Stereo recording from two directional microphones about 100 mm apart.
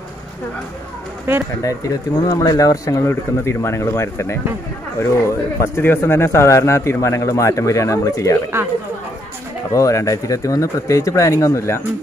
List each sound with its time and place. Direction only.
1.3 s speech: 20° right (ahead or behind)
1.6 s speech: 35° left (ahead or behind)
9.7 s speech: 35° left (ahead or behind)